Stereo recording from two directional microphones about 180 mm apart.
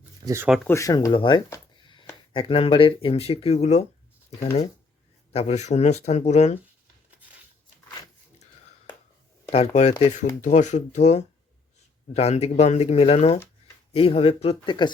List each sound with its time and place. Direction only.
0.3 s speech: 15° right (ahead or behind)
0.7 s speech: 20° left (ahead or behind)
1.8 s a sound: 25° left (ahead or behind)
2.3 s speech: 30° left (ahead or behind)
5.3 s speech: 35° left (ahead or behind)
9.5 s speech: 35° left (ahead or behind)